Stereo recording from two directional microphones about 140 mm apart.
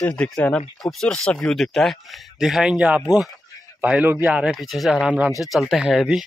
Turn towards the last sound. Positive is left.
turn(degrees=-5)  # may be behind; listen again after turning